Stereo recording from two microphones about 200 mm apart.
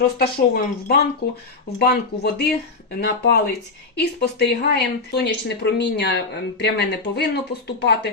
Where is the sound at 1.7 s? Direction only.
50° left (ahead or behind).